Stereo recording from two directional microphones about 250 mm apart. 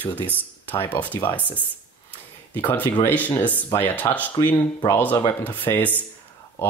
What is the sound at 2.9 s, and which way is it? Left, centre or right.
Speech, centre.